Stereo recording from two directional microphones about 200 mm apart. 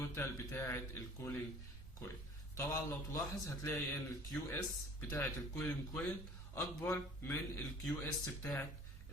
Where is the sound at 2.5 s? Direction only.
15° left (ahead or behind).